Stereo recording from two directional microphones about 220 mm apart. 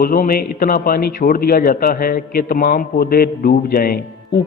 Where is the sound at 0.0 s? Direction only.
40° left (ahead or behind).